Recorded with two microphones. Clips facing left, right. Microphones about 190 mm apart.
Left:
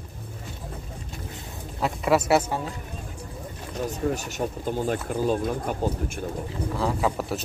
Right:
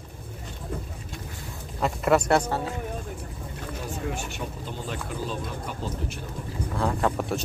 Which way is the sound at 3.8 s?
40° left (ahead or behind).